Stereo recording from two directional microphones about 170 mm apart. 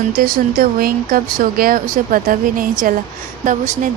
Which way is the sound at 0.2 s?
60° right (ahead or behind).